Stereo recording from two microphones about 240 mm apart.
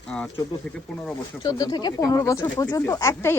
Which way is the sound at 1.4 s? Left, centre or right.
Centre.